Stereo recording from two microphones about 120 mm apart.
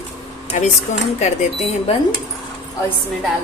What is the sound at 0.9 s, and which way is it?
Speech, 90° left.